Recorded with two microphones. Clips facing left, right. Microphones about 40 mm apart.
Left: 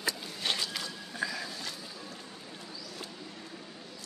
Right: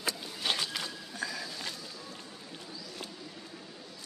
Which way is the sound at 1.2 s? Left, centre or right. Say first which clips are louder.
Left 3 dB; centre.